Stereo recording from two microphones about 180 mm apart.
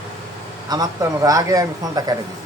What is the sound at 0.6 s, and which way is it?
A man's voice, 20° right (ahead or behind).